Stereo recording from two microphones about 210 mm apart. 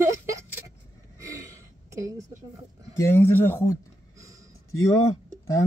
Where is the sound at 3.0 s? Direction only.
10° left (ahead or behind).